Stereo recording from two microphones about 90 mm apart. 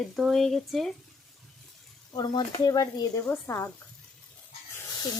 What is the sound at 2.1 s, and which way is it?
Speech, 50° left (ahead or behind).